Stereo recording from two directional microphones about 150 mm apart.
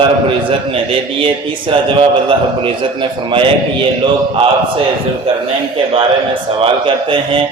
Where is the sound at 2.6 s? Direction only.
35° right (ahead or behind).